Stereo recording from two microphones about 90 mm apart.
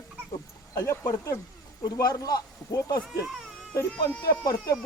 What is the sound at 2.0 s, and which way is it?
Speech, 50° left (ahead or behind).